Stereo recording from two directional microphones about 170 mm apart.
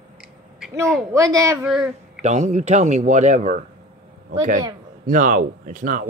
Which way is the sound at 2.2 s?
45° right (ahead or behind).